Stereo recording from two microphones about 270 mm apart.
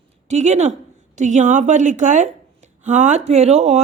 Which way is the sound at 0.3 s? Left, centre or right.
Right.